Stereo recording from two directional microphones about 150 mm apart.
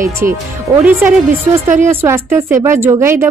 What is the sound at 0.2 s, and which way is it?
Speech, 70° right (ahead or behind).